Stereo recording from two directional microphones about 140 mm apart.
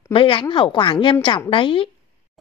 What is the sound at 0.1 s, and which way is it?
Speech, 40° left (ahead or behind).